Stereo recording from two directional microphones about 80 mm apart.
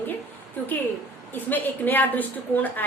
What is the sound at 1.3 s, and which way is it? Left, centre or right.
A woman's voice, left.